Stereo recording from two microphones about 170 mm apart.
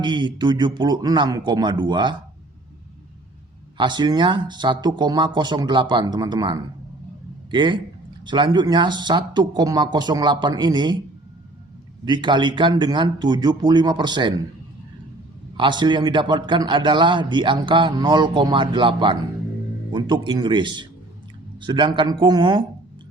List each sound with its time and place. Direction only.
0.0 s a man's voice: 25° right (ahead or behind)
3.8 s a man's voice: 25° right (ahead or behind)
12.0 s a man's voice: 25° right (ahead or behind)
15.5 s a man's voice: 30° right (ahead or behind)